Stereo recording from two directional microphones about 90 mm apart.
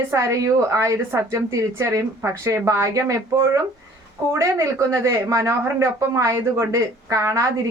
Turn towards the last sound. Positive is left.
turn(degrees=-35)  # may be behind; listen again after turning